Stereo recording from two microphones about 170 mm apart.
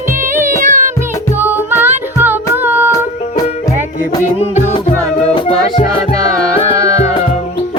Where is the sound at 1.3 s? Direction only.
10° right (ahead or behind).